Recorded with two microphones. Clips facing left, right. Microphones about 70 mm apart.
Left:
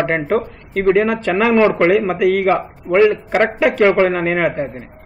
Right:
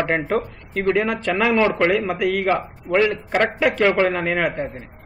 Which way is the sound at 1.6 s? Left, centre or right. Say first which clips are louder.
Left 5 dB; centre.